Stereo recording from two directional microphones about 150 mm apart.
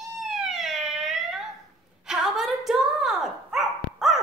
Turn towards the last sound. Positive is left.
turn(degrees=0)  # may be behind; listen again after turning